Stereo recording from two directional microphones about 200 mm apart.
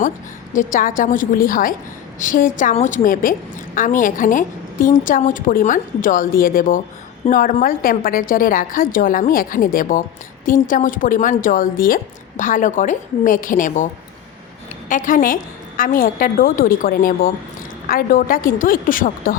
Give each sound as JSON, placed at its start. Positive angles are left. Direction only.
{"t": 0.5, "sound": "a woman's voice", "side_deg": 45}
{"t": 14.8, "sound": "a woman's voice", "side_deg": 40}